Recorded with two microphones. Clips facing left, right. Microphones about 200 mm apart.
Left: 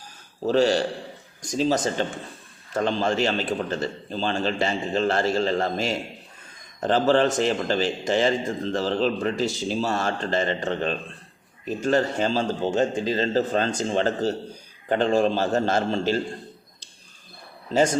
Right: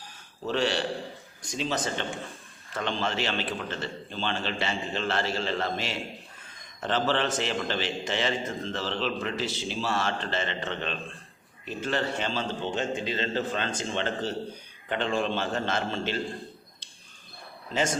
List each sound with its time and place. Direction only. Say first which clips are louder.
0.4 s a man's voice: left 7 dB; 40° left (ahead or behind)